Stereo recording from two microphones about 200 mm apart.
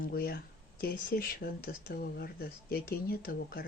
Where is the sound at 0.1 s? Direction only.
45° left (ahead or behind).